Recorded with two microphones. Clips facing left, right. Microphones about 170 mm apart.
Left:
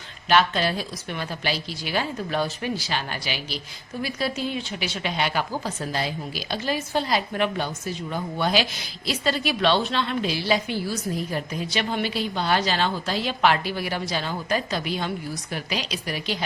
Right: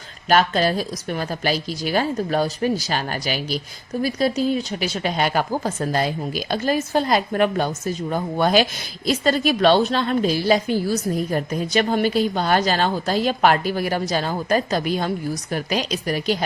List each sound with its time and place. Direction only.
0.3 s a woman's voice: 45° right (ahead or behind)